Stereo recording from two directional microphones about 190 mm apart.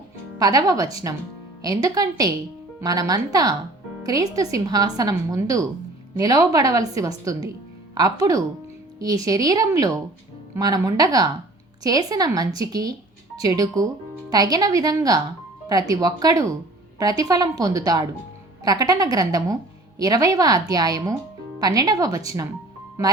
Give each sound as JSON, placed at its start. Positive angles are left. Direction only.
{"t": 0.3, "sound": "a woman's voice", "side_deg": -20}